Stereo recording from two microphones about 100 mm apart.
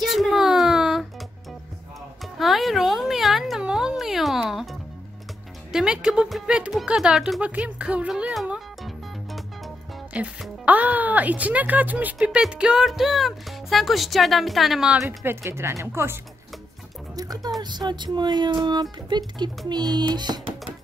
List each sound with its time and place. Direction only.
0.0 s a sound: centre (ahead or behind)
2.3 s a sound: centre (ahead or behind)
5.7 s speech: 5° right (ahead or behind)
8.5 s music: centre (ahead or behind)
10.1 s speech: 15° right (ahead or behind)
15.0 s speech: 25° right (ahead or behind)
17.1 s music: 40° right (ahead or behind)
17.6 s speech: 45° right (ahead or behind)